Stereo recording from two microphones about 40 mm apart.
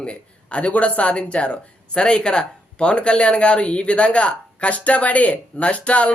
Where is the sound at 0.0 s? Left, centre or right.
Left.